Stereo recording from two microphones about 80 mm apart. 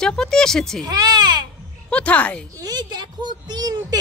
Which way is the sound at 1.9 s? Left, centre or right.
Centre.